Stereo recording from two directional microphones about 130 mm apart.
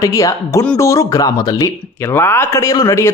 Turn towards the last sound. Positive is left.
turn(degrees=20)  # may be behind; listen again after turning